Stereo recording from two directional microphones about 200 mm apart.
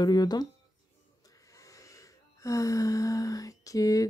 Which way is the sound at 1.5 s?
15° left (ahead or behind).